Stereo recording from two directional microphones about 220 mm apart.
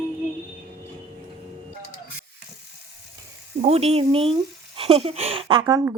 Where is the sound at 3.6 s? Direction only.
30° right (ahead or behind).